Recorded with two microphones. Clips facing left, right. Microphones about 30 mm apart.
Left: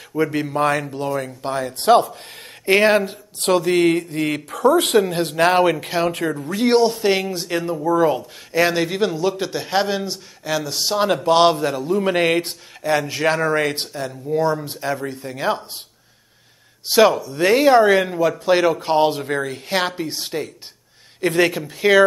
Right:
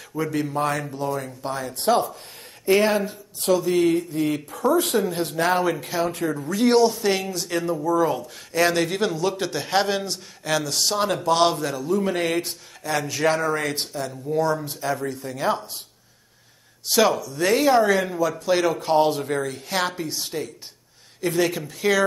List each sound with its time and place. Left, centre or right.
0.1 s speech: left
1.7 s speech: left
2.6 s speech: left
6.6 s speech: left; by 10.6 s centre
10.9 s speech: centre
16.9 s speech: left